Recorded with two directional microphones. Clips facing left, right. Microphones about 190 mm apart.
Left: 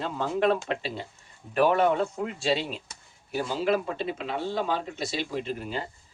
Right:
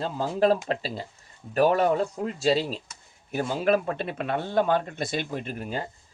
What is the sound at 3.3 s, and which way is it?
Speech, 50° right (ahead or behind).